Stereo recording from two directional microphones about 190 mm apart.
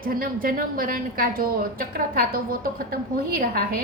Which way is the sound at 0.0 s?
50° right (ahead or behind).